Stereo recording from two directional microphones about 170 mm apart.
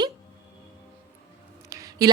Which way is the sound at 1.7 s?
20° right (ahead or behind).